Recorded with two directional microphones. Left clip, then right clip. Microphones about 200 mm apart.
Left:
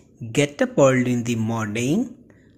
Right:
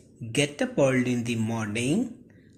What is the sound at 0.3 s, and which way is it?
Speech, 25° left (ahead or behind).